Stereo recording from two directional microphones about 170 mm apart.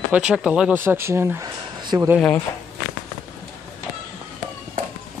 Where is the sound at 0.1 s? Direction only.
5° right (ahead or behind).